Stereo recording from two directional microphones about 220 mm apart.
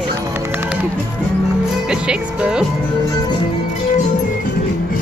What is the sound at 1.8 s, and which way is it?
Speech, 5° right (ahead or behind).